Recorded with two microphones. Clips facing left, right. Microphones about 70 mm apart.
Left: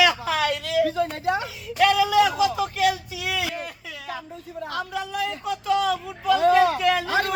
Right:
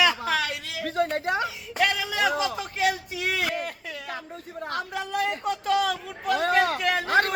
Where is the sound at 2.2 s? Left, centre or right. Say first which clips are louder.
Left 6 dB; right.